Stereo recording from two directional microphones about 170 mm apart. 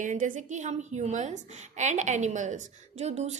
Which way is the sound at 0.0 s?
50° right (ahead or behind).